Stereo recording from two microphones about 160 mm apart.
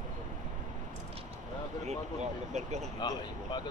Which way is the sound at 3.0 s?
25° left (ahead or behind).